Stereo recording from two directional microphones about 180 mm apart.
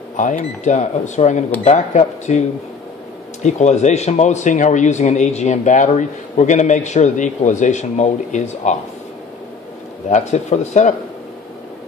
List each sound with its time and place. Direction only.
0.2 s speech: 45° left (ahead or behind)
3.4 s speech: 40° left (ahead or behind)
10.0 s speech: 40° left (ahead or behind)